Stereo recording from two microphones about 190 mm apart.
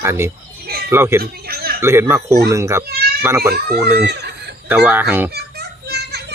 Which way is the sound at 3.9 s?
60° right (ahead or behind).